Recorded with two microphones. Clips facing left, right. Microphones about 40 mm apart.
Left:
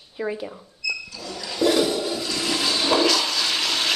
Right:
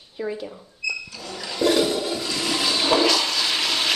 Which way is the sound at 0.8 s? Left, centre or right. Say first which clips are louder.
Even; right.